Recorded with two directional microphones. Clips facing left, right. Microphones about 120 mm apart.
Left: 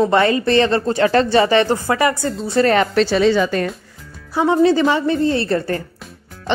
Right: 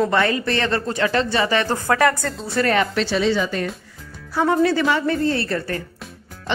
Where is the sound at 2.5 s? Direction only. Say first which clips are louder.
Left 4 dB; 30° left (ahead or behind); by 3.7 s 60° left (ahead or behind).